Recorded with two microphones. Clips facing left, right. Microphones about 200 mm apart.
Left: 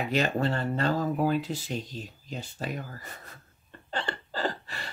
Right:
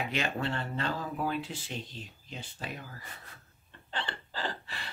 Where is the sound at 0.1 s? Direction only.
40° left (ahead or behind).